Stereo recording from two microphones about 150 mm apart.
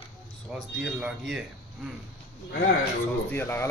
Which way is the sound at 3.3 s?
15° left (ahead or behind).